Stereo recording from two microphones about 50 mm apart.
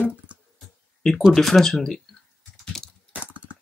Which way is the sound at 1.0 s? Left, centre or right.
Centre.